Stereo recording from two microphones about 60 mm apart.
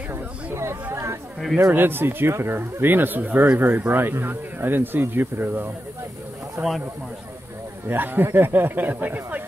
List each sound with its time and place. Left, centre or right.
1.7 s speech: right
7.9 s speech: right